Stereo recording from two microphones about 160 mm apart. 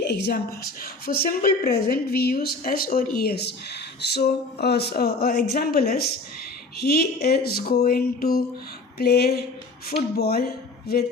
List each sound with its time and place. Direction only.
0.0 s a woman's voice: 90° left; by 3.1 s 65° left (ahead or behind)
3.2 s a woman's voice: 85° left